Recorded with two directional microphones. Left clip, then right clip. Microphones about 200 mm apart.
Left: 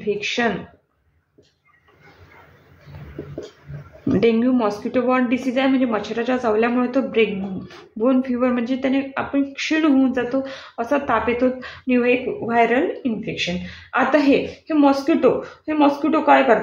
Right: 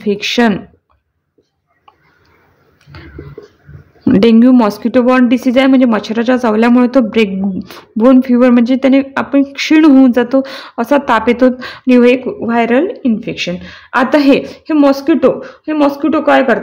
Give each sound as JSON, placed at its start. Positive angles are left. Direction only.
{"t": 0.0, "sound": "speech", "side_deg": -60}
{"t": 4.1, "sound": "speech", "side_deg": -60}